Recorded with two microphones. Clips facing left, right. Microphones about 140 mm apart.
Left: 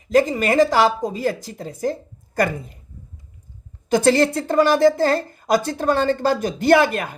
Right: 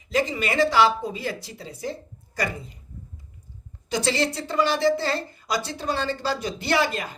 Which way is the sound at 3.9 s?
50° left (ahead or behind).